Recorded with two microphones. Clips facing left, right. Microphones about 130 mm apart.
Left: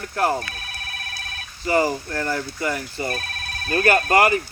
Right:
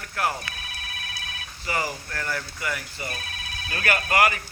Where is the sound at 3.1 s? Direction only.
50° left (ahead or behind); by 4.4 s 35° left (ahead or behind).